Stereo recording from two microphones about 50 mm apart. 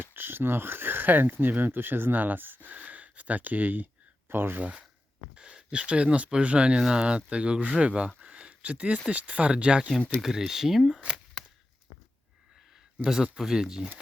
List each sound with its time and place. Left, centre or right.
0.1 s speech: right
2.7 s speech: right
4.3 s speech: right
4.6 s speech: right
8.2 s a sound: centre
9.0 s speech: right
10.2 s speech: centre
13.1 s speech: centre